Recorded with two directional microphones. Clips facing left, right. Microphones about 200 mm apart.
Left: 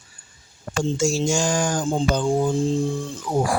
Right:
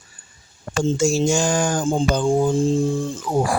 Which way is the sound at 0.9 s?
55° right (ahead or behind).